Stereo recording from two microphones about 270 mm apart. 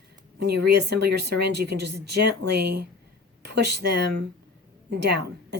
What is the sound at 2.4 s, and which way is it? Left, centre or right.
Speech, right.